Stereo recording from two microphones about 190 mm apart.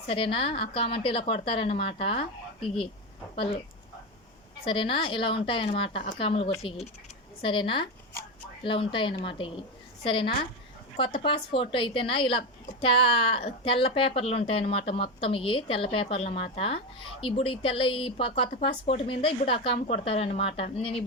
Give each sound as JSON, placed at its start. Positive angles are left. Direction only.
{"t": 0.1, "sound": "a woman's voice", "side_deg": 30}
{"t": 4.6, "sound": "a woman's voice", "side_deg": 25}